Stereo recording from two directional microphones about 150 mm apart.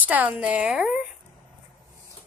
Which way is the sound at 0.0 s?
10° right (ahead or behind).